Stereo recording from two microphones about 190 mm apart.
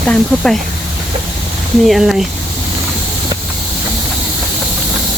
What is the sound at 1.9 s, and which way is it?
Speech, centre (ahead or behind).